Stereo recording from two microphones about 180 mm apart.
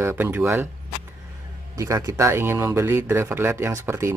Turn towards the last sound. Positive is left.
turn(degrees=-15)  # may be behind; listen again after turning